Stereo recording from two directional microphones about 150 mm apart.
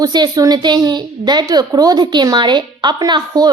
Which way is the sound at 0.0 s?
25° right (ahead or behind).